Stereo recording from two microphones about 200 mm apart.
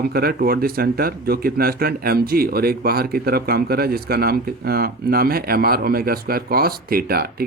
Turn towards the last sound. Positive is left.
turn(degrees=-50)  # may be behind; listen again after turning